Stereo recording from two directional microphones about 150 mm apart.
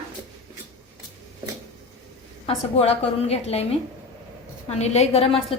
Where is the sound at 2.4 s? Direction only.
40° left (ahead or behind).